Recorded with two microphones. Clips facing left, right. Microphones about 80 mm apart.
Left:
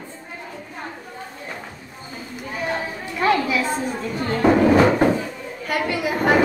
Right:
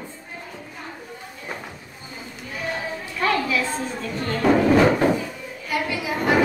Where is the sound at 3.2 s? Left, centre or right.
Left.